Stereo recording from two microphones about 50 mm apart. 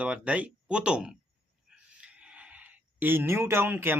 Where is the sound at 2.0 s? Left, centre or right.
Right.